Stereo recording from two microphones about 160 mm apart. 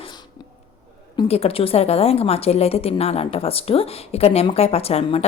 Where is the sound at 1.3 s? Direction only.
40° left (ahead or behind).